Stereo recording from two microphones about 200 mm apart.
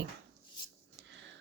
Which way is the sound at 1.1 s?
65° right (ahead or behind).